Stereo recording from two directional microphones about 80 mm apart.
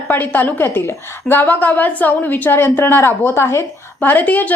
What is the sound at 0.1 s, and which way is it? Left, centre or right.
A woman's voice, left.